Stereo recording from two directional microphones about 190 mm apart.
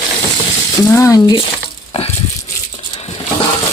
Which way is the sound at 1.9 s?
30° left (ahead or behind).